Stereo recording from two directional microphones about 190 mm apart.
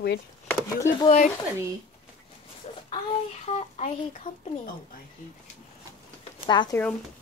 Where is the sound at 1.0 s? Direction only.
40° left (ahead or behind).